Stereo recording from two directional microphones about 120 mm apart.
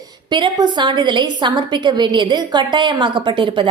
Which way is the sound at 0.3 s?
40° right (ahead or behind).